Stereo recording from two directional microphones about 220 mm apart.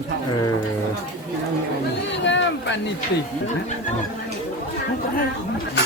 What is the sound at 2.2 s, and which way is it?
Speech, 55° left (ahead or behind).